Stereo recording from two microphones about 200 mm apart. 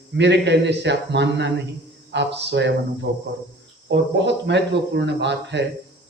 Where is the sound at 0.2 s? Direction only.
60° right (ahead or behind).